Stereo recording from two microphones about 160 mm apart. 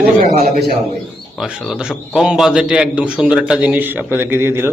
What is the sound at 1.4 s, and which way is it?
A man's voice, centre (ahead or behind).